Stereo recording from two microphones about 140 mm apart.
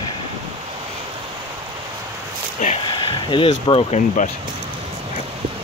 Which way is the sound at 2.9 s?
35° left (ahead or behind).